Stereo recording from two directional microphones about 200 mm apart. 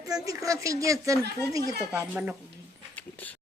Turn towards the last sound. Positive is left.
turn(degrees=10)  # may be behind; listen again after turning